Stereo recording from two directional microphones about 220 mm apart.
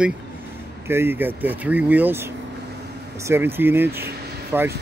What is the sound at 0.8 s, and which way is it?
Speech, 10° right (ahead or behind).